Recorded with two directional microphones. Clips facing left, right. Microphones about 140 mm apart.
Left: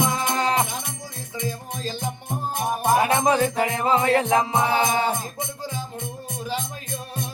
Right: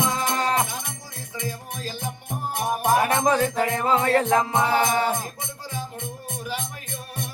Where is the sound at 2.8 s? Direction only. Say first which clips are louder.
Left 1 dB; 5° left (ahead or behind).